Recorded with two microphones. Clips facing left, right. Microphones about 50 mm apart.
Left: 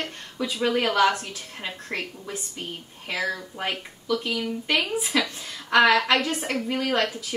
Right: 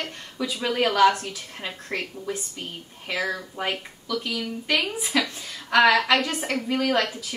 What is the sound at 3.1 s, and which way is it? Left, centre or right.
Speech, centre.